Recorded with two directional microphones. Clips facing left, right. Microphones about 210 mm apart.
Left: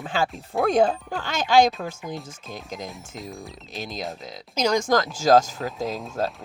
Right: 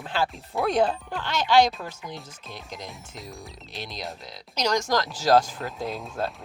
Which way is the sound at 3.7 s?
45° left (ahead or behind).